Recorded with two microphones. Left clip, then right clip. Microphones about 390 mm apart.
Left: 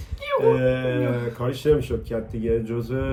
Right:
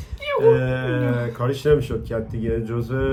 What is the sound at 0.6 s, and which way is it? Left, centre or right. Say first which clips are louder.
A man's voice: left 2 dB; centre.